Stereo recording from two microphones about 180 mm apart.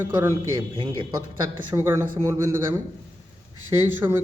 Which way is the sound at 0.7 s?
30° right (ahead or behind).